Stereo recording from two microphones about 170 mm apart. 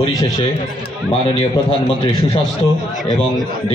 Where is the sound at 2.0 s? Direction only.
30° left (ahead or behind).